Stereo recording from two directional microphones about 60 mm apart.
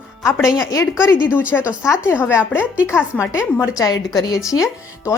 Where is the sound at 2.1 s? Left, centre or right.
Left.